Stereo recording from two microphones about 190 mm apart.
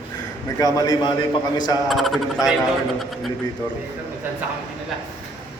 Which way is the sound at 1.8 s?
Centre (ahead or behind).